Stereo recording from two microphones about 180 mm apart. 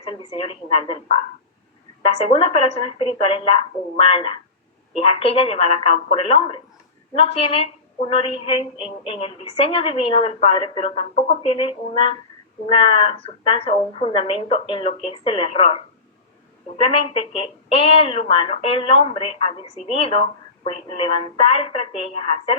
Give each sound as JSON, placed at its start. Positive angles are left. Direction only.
{"t": 0.0, "sound": "a woman's voice", "side_deg": 35}